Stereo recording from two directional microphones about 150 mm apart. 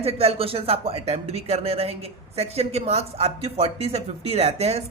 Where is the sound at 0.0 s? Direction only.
40° right (ahead or behind).